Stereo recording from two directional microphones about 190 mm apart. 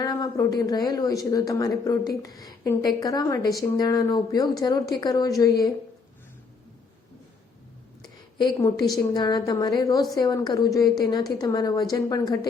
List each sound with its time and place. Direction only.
0.0 s speech: 20° left (ahead or behind)
8.4 s speech: 20° left (ahead or behind)